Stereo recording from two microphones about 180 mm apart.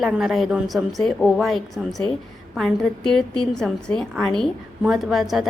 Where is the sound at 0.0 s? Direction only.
Centre (ahead or behind).